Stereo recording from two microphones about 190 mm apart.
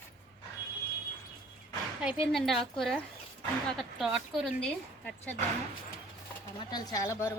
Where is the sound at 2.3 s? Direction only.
Centre (ahead or behind).